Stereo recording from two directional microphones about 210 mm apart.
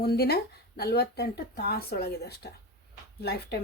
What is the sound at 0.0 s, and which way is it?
Speech, 50° left (ahead or behind).